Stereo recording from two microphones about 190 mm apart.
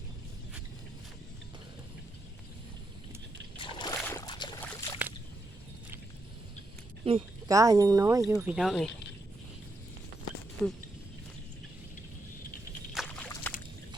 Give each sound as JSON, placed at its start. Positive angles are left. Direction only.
{"t": 3.6, "sound": "vehicle", "side_deg": 25}
{"t": 4.0, "sound": "boat", "side_deg": 15}
{"t": 4.8, "sound": "a sound", "side_deg": 15}
{"t": 7.0, "sound": "a sound", "side_deg": -30}
{"t": 7.5, "sound": "speech", "side_deg": -20}
{"t": 10.6, "sound": "speech", "side_deg": 5}
{"t": 12.9, "sound": "boat", "side_deg": 0}